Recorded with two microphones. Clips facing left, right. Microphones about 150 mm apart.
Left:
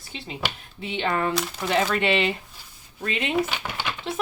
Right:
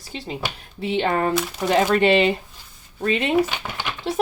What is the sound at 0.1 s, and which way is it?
Speech, 40° right (ahead or behind).